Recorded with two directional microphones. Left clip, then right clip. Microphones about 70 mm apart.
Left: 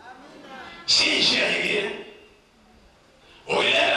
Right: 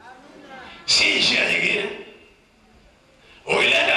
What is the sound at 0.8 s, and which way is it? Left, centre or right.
Music, right.